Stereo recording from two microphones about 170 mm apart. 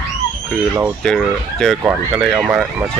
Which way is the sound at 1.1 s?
5° left (ahead or behind).